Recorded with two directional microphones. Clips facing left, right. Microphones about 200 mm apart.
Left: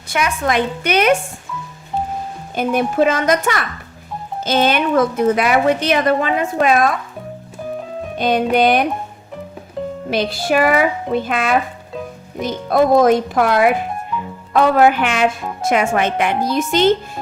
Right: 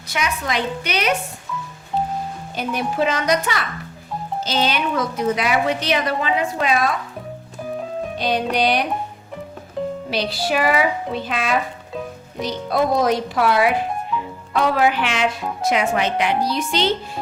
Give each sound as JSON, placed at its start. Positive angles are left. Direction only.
{"t": 0.1, "sound": "a woman's voice", "side_deg": 50}
{"t": 2.6, "sound": "a woman's voice", "side_deg": 50}
{"t": 8.2, "sound": "a woman's voice", "side_deg": 50}
{"t": 10.3, "sound": "a woman's voice", "side_deg": 50}